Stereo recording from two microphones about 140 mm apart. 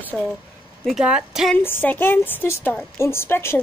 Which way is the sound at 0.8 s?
5° right (ahead or behind).